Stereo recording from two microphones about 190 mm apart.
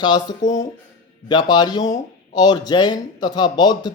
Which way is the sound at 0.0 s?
20° left (ahead or behind).